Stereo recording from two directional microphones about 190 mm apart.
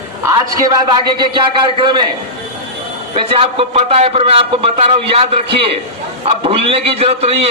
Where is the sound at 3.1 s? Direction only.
30° right (ahead or behind).